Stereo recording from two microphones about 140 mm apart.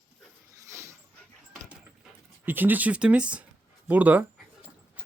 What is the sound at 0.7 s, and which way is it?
Dog, 20° right (ahead or behind).